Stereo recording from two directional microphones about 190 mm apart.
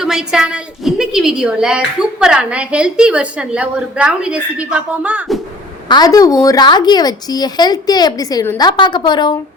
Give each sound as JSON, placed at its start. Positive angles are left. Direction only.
{"t": 0.0, "sound": "a woman's voice", "side_deg": -5}
{"t": 5.9, "sound": "a woman's voice", "side_deg": 20}